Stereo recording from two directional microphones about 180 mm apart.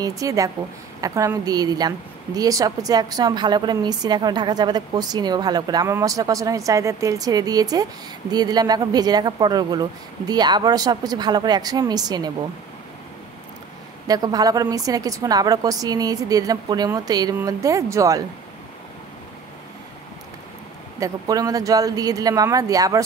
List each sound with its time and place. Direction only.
0.0 s a woman's voice: 20° right (ahead or behind)
14.0 s a woman's voice: 20° right (ahead or behind)
21.0 s a woman's voice: 20° right (ahead or behind)